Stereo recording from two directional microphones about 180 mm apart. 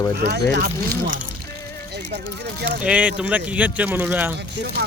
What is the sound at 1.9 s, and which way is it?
Speech, 70° right (ahead or behind).